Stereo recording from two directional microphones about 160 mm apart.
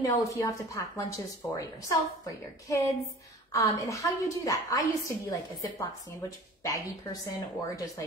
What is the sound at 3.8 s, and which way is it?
A woman's voice, 20° left (ahead or behind).